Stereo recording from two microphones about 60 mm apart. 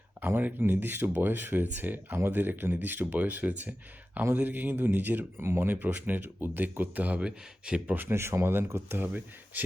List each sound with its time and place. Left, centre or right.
0.2 s speech: right; by 7.9 s centre
7.9 s speech: right